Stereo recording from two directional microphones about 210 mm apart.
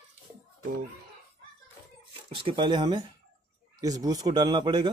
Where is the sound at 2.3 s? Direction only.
25° right (ahead or behind).